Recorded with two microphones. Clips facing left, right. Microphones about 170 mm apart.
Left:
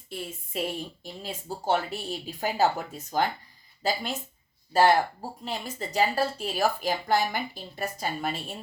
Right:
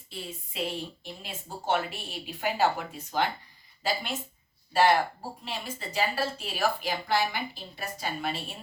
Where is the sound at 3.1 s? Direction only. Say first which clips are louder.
Left 2 dB; 40° left (ahead or behind).